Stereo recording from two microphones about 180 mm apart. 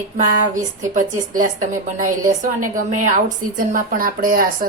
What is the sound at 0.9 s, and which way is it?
A woman's voice, 45° right (ahead or behind).